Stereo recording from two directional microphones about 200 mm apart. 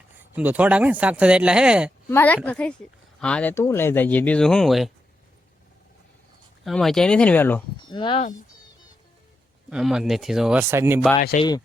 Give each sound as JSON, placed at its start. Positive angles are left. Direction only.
{"t": 0.3, "sound": "speech", "side_deg": -10}
{"t": 2.0, "sound": "speech", "side_deg": 10}
{"t": 6.7, "sound": "a man's voice", "side_deg": 0}
{"t": 7.9, "sound": "speech", "side_deg": 25}
{"t": 9.6, "sound": "a man's voice", "side_deg": -5}
{"t": 11.2, "sound": "speech", "side_deg": 45}